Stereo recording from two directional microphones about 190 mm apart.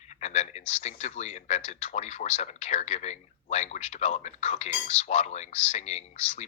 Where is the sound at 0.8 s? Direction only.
35° left (ahead or behind).